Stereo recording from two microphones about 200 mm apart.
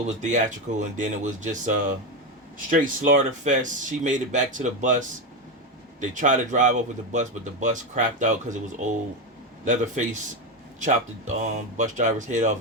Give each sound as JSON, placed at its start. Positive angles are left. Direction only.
{"t": 0.2, "sound": "speech", "side_deg": -35}